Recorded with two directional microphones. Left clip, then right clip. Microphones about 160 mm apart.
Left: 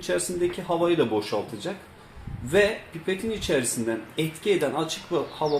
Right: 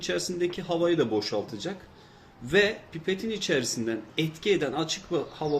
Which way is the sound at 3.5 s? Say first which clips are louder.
Left 2 dB; 40° right (ahead or behind).